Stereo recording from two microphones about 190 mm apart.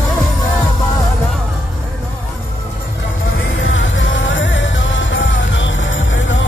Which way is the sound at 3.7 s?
80° left.